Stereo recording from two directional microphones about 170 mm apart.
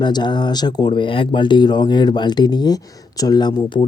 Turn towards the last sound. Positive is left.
turn(degrees=25)  # may be behind; listen again after turning